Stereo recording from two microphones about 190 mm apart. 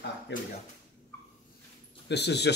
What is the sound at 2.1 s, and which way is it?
Speech, 60° left (ahead or behind).